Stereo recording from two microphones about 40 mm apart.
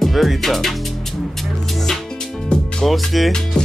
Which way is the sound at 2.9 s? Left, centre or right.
Centre.